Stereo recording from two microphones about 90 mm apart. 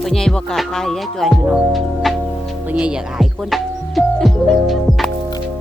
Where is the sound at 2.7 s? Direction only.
10° right (ahead or behind).